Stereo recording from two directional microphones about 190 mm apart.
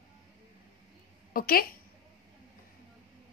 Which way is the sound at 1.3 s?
50° left (ahead or behind).